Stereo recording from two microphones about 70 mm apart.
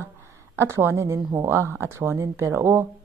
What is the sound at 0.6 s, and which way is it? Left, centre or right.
Speech, right.